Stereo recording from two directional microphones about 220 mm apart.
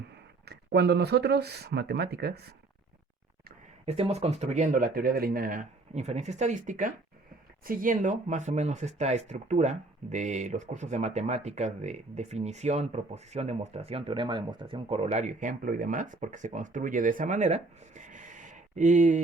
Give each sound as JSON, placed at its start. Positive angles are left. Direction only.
{"t": 0.4, "sound": "speech", "side_deg": -50}
{"t": 3.8, "sound": "speech", "side_deg": -30}